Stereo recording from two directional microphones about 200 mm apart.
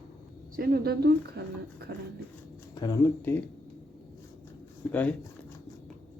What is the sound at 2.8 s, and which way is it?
Speech, 15° left (ahead or behind).